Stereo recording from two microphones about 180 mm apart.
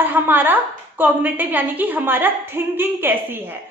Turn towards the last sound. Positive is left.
turn(degrees=-10)  # may be behind; listen again after turning